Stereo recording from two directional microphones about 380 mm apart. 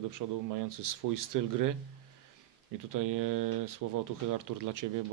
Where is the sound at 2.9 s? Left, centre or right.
Right.